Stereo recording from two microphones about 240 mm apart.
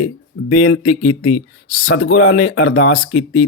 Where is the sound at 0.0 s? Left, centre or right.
Left.